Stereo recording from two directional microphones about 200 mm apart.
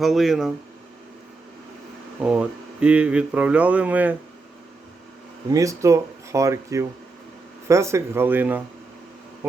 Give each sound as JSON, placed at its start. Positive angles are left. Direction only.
{"t": 0.0, "sound": "speech", "side_deg": 0}
{"t": 2.2, "sound": "speech", "side_deg": -5}
{"t": 5.5, "sound": "speech", "side_deg": -15}